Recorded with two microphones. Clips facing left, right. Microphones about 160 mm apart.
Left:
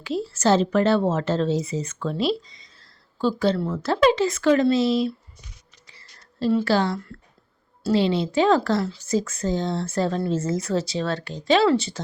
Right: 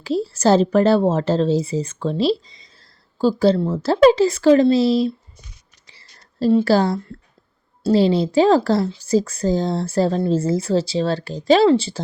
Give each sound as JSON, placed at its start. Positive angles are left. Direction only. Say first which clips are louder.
{"t": 0.0, "sound": "speech", "louder": "right 4 dB", "side_deg": -35}
{"t": 5.9, "sound": "a sound", "louder": "right 2 dB", "side_deg": -30}
{"t": 6.7, "sound": "speech", "louder": "right 5 dB", "side_deg": -35}